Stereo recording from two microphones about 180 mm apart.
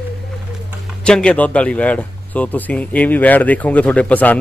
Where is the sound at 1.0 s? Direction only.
5° left (ahead or behind).